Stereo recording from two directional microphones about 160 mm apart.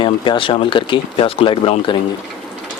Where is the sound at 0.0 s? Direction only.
30° left (ahead or behind).